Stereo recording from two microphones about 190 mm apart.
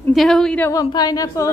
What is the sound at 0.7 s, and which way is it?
Speech, 20° left (ahead or behind).